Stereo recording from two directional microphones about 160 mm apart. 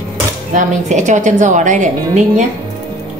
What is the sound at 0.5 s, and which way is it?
A woman's voice, 50° right (ahead or behind).